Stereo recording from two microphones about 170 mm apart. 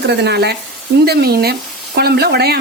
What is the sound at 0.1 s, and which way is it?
Speech, 80° right.